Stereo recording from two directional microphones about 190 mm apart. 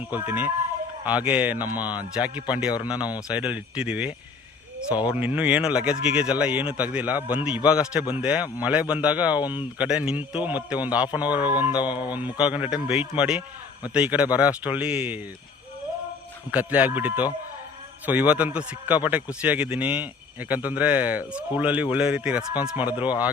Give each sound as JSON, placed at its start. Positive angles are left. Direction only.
{"t": 0.0, "sound": "a man's voice", "side_deg": -10}
{"t": 11.8, "sound": "mantra", "side_deg": 25}
{"t": 12.1, "sound": "a man's voice", "side_deg": -10}
{"t": 16.5, "sound": "a man's voice", "side_deg": -10}